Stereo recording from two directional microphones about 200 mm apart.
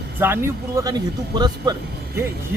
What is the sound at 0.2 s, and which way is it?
Speech, 10° right (ahead or behind).